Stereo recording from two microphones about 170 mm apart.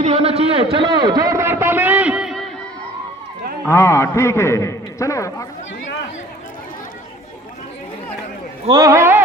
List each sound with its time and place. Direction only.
0.0 s a sound: 40° right (ahead or behind); by 2.5 s centre (ahead or behind)
3.7 s a man's voice: 15° left (ahead or behind)
8.6 s a man's voice: 25° right (ahead or behind)